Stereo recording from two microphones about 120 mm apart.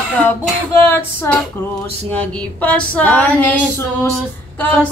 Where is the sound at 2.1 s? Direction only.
10° left (ahead or behind).